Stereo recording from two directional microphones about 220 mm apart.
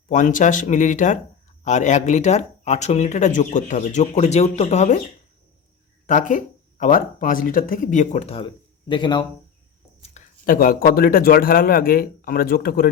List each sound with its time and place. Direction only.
0.1 s speech: 35° left (ahead or behind)
6.1 s a man's voice: 35° left (ahead or behind)
10.0 s speech: 35° left (ahead or behind)